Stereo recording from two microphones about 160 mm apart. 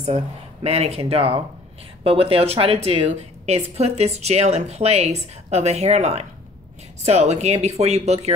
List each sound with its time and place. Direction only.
0.1 s a woman's voice: 45° right (ahead or behind)